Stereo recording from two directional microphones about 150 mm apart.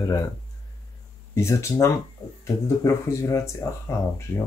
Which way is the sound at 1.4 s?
20° left (ahead or behind).